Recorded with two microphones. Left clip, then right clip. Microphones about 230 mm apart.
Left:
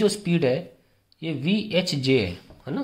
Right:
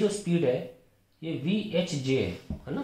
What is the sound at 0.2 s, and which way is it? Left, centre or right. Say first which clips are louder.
Speech: left 4 dB; left.